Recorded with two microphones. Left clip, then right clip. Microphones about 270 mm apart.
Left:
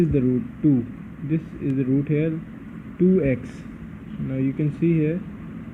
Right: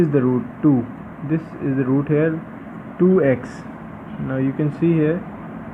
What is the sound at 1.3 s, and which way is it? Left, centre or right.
Speech, right.